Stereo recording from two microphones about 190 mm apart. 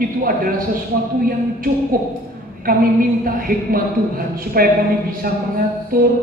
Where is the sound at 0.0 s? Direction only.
50° right (ahead or behind).